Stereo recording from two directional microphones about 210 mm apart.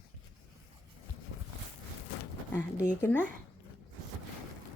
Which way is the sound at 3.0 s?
5° left (ahead or behind).